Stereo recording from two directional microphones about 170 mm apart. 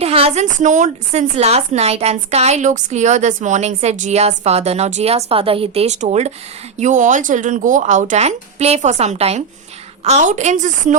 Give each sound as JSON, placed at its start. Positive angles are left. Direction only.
{"t": 0.0, "sound": "a woman's voice", "side_deg": -35}